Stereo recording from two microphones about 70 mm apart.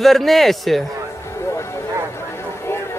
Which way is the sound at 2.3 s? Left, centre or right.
Left.